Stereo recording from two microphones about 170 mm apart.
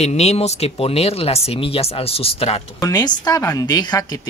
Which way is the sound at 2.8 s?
25° left (ahead or behind).